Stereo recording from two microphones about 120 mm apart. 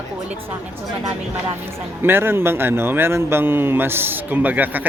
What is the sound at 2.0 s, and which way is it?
Speech, 20° right (ahead or behind).